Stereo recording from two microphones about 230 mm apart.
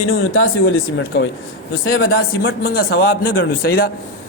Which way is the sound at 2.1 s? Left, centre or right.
Left.